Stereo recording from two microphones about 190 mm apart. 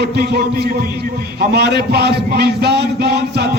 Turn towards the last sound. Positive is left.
turn(degrees=-60)  # may be behind; listen again after turning